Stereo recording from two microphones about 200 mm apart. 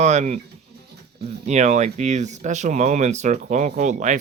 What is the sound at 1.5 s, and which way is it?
Speech, 35° right (ahead or behind).